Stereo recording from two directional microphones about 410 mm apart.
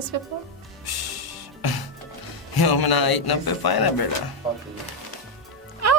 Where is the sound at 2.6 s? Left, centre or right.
Left.